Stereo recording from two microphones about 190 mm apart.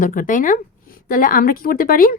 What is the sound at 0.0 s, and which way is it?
A woman's voice, 45° left (ahead or behind).